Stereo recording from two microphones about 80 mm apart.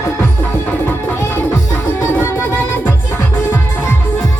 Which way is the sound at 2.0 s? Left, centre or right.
Left.